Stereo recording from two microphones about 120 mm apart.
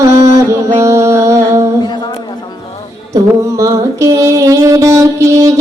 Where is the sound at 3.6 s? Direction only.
25° right (ahead or behind).